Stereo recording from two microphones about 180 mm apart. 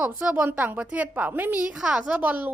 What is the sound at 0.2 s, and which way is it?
A woman's voice, 10° right (ahead or behind).